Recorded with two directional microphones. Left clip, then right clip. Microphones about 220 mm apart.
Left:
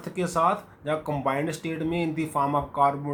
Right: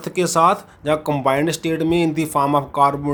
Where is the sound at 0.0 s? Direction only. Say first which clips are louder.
Right 8 dB; 45° right (ahead or behind).